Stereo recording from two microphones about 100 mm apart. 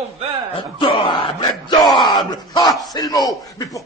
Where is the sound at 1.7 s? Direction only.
45° left (ahead or behind).